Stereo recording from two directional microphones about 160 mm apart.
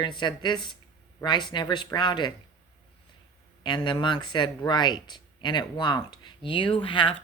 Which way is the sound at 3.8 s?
30° left (ahead or behind).